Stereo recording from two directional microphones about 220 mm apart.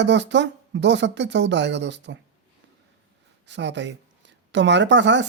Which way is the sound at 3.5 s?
55° right (ahead or behind).